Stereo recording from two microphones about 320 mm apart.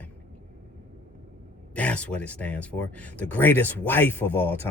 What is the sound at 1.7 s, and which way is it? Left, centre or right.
Speech, centre.